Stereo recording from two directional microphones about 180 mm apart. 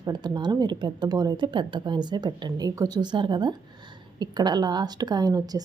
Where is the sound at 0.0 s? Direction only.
25° right (ahead or behind).